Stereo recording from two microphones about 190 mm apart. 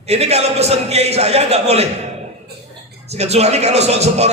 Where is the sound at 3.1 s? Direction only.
35° right (ahead or behind).